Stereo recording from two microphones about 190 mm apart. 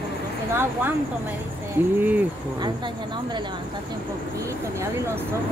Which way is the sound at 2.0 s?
10° right (ahead or behind).